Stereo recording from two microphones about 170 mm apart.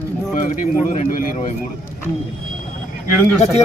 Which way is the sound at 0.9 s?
45° left (ahead or behind).